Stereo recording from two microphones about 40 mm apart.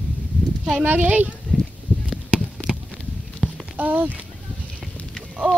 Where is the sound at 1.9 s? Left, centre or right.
Left.